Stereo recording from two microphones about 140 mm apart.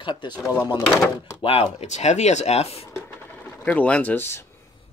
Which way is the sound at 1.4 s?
45° left (ahead or behind).